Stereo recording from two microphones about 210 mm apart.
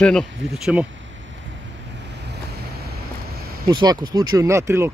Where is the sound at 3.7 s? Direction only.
20° right (ahead or behind).